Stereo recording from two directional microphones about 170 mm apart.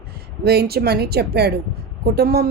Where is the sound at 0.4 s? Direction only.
70° right (ahead or behind).